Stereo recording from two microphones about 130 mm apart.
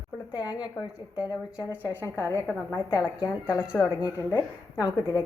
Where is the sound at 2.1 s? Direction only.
25° left (ahead or behind).